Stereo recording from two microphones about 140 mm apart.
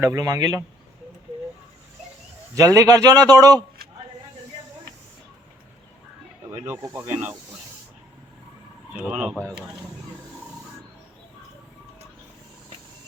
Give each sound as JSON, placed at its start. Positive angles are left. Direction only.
{"t": 0.0, "sound": "a man's voice", "side_deg": -20}
{"t": 2.6, "sound": "a man's voice", "side_deg": -25}
{"t": 6.5, "sound": "speech", "side_deg": -20}
{"t": 8.9, "sound": "speech", "side_deg": -10}